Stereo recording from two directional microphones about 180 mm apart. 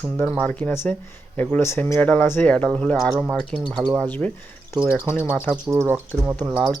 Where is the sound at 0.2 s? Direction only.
10° left (ahead or behind).